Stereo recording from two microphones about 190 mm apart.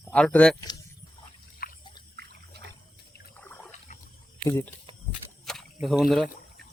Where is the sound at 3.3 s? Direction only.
10° left (ahead or behind).